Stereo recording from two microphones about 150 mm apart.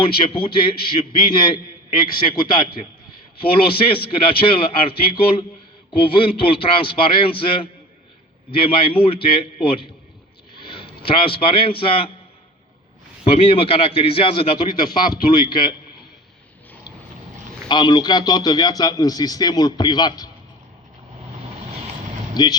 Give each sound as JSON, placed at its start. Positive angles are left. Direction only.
{"t": 0.0, "sound": "a man's voice", "side_deg": 35}
{"t": 13.2, "sound": "a man's voice", "side_deg": 40}
{"t": 17.7, "sound": "a man's voice", "side_deg": 30}
{"t": 22.4, "sound": "a man's voice", "side_deg": 30}